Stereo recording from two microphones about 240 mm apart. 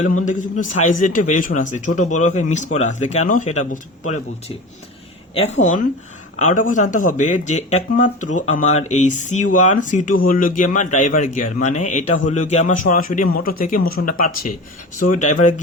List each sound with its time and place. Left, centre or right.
0.3 s speech: left